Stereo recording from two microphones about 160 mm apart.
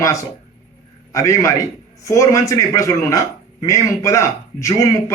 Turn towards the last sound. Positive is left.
turn(degrees=20)  # may be behind; listen again after turning